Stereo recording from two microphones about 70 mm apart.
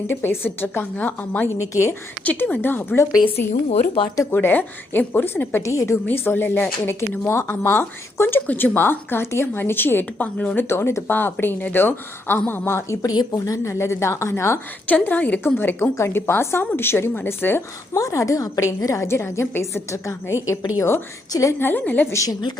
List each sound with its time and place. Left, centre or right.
0.1 s a woman's voice: left
1.7 s a woman's voice: left
2.2 s a woman's voice: left
5.6 s a woman's voice: left
6.1 s a woman's voice: left
13.0 s speech: left
13.7 s a woman's voice: left
14.8 s a woman's voice: left
17.9 s a woman's voice: left
21.6 s a woman's voice: left
22.3 s speech: left